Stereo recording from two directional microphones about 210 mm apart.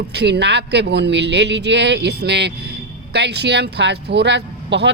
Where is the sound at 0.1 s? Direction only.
55° right (ahead or behind).